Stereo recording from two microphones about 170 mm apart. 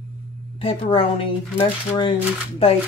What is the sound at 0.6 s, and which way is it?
Speech, 35° left (ahead or behind).